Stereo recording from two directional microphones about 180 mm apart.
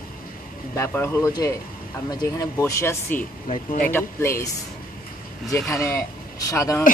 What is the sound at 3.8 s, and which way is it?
Speech, 10° left (ahead or behind).